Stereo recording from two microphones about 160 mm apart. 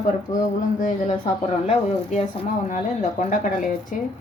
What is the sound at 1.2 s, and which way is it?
Speech, 40° left (ahead or behind).